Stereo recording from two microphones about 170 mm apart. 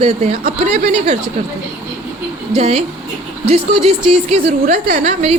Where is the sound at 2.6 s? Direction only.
40° right (ahead or behind).